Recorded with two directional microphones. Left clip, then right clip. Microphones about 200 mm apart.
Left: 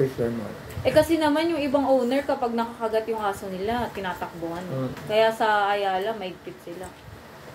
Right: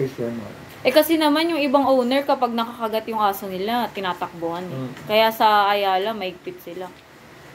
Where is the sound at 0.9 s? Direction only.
45° right (ahead or behind).